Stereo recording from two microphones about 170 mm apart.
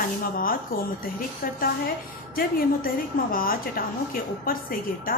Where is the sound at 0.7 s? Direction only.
60° left (ahead or behind).